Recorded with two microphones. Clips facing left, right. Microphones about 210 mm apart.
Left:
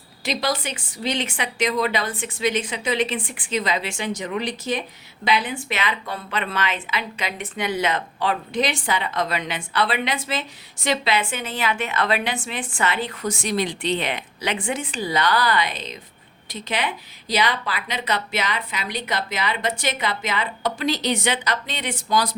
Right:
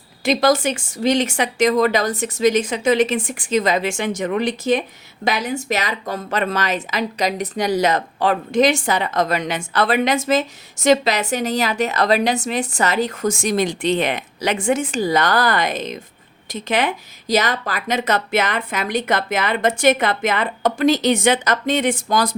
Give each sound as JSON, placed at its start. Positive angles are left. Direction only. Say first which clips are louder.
{"t": 0.3, "sound": "a woman's voice", "louder": "right 9 dB", "side_deg": -45}